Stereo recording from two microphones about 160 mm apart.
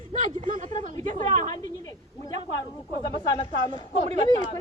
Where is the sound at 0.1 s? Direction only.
50° right (ahead or behind).